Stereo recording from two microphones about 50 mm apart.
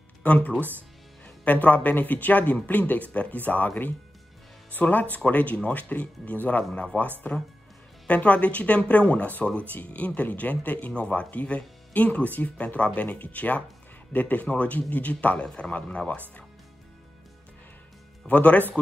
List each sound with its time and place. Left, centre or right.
0.2 s speech: left
0.6 s speech: right
1.2 s speech: left
10.9 s speech: left
18.2 s speech: left